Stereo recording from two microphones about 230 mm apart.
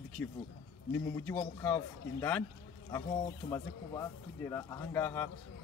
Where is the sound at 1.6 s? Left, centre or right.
Centre.